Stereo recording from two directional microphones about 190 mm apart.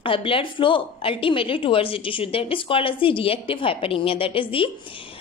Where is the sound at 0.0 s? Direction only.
25° left (ahead or behind).